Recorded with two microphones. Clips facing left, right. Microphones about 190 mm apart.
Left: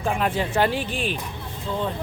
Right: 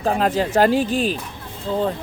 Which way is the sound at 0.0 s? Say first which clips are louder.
Right 4 dB; 40° right (ahead or behind).